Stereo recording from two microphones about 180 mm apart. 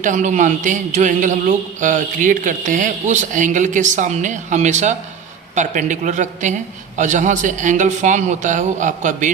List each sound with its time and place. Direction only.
0.0 s a man's voice: 45° right (ahead or behind)